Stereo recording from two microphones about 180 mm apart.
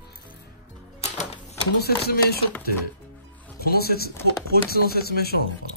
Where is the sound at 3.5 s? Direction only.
60° left (ahead or behind).